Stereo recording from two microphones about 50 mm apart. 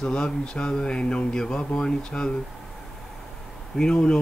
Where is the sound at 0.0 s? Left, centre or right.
Centre.